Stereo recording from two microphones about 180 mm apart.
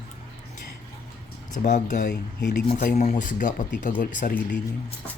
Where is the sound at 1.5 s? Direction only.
45° left (ahead or behind).